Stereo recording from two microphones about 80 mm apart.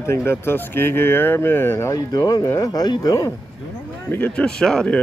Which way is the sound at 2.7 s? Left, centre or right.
Left.